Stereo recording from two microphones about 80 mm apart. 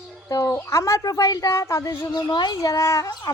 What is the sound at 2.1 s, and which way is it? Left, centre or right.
Speech, left.